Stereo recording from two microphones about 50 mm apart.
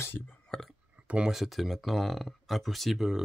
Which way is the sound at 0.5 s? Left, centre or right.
Centre.